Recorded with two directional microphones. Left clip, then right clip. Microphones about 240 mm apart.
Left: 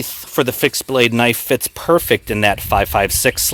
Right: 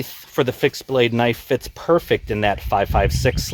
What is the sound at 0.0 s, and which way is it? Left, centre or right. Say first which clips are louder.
Speech: left 3 dB; left.